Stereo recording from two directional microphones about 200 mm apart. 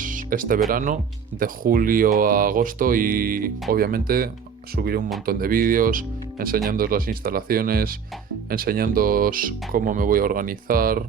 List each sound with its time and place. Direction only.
0.0 s music: 40° right (ahead or behind)
0.7 s speech: 40° right (ahead or behind)